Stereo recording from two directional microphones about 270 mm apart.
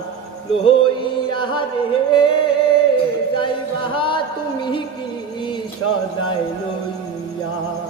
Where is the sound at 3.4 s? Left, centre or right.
Centre.